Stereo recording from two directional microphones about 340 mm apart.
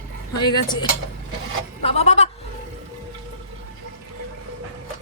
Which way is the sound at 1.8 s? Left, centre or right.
Centre.